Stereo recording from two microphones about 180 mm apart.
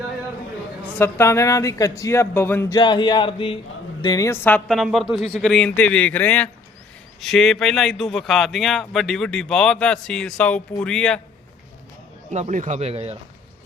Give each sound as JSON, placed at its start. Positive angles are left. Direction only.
{"t": 0.9, "sound": "a man's voice", "side_deg": 15}
{"t": 12.3, "sound": "speech", "side_deg": -40}